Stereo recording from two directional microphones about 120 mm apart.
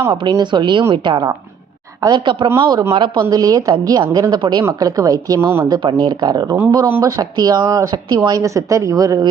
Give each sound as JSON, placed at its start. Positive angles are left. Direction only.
{"t": 0.3, "sound": "a woman's voice", "side_deg": -40}
{"t": 5.4, "sound": "speech", "side_deg": -20}
{"t": 5.6, "sound": "a woman's voice", "side_deg": -35}